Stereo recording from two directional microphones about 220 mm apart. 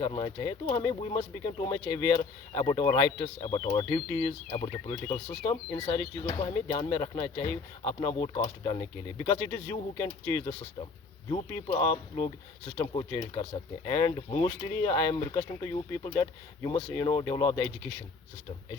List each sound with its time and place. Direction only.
0.0 s speech: 20° left (ahead or behind)